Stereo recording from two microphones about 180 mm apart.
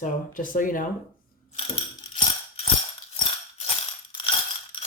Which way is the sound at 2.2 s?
35° left (ahead or behind).